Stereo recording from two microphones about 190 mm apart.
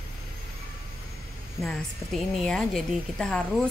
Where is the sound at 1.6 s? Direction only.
Centre (ahead or behind).